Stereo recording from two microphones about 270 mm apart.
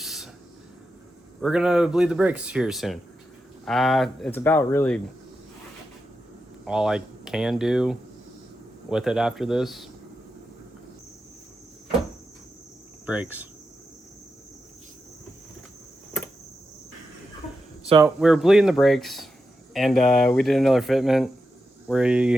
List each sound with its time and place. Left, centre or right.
0.0 s a sound: centre
1.4 s speech: centre
6.7 s speech: centre
13.1 s speech: centre
17.8 s speech: centre
18.2 s speech: centre